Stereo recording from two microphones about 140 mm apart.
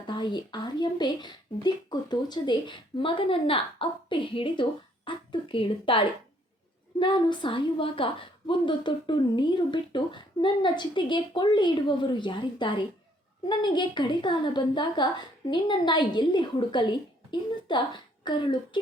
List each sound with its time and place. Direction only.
0.1 s a woman's voice: 30° left (ahead or behind)